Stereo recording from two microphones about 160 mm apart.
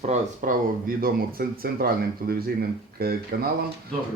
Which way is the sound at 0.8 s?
65° right (ahead or behind).